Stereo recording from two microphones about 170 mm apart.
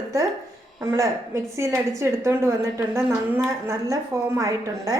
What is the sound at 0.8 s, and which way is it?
A woman's voice, 15° right (ahead or behind).